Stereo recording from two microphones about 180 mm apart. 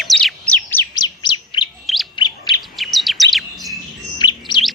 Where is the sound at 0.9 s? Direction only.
25° left (ahead or behind).